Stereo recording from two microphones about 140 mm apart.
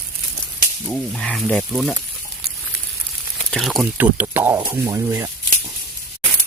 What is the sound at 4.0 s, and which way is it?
Speech, 15° right (ahead or behind).